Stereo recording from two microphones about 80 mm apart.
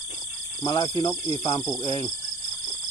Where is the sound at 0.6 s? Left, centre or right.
Left.